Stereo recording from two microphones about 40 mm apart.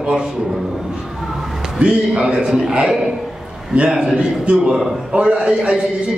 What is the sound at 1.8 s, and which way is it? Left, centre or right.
A man's voice, right.